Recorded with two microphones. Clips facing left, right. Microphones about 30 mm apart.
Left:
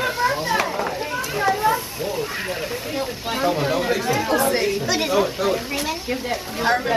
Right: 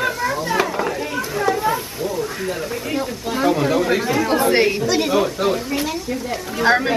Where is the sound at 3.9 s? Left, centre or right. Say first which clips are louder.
Right 3 dB; centre.